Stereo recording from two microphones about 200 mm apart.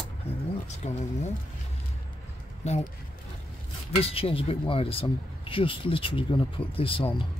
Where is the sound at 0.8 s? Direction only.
35° left (ahead or behind).